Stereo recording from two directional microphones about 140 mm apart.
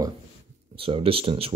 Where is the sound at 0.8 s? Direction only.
40° right (ahead or behind).